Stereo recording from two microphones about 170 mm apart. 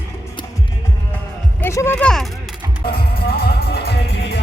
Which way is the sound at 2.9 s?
65° left (ahead or behind).